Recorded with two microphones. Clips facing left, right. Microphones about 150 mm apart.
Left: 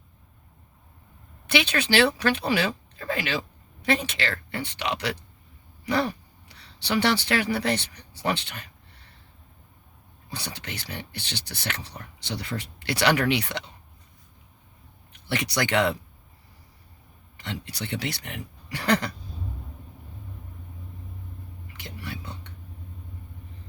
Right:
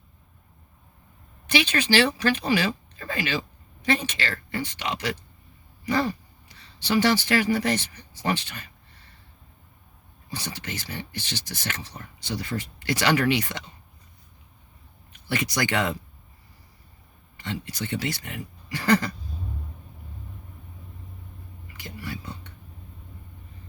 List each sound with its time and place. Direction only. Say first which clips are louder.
1.5 s speech: right 1 dB; 70° left (ahead or behind)
6.5 s speech: right 2 dB; 70° left (ahead or behind)
10.2 s speech: right 2 dB; 70° left (ahead or behind)
15.1 s speech: even; 65° left (ahead or behind)
17.4 s speech: right 2 dB; 70° left (ahead or behind)
21.8 s whispering: right 2 dB; 65° left (ahead or behind)